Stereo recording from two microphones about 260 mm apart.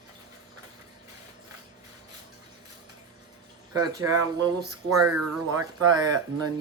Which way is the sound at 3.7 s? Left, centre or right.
Centre.